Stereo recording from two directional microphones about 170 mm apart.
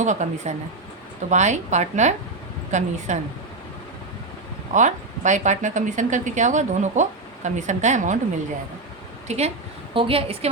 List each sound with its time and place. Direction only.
0.0 s speech: 45° right (ahead or behind)
4.7 s speech: 45° right (ahead or behind)
9.2 s a woman's voice: 40° right (ahead or behind)